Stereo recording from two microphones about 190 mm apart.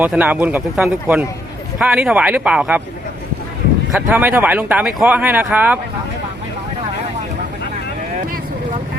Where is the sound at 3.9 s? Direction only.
10° right (ahead or behind).